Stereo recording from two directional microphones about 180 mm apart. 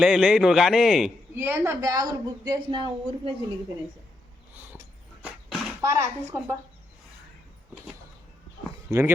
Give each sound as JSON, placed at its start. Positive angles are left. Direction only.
{"t": 0.0, "sound": "a man's voice", "side_deg": -5}
{"t": 1.4, "sound": "speech", "side_deg": -15}
{"t": 5.2, "sound": "a sound", "side_deg": 0}
{"t": 5.8, "sound": "a woman's voice", "side_deg": -15}
{"t": 8.9, "sound": "a woman's voice", "side_deg": -15}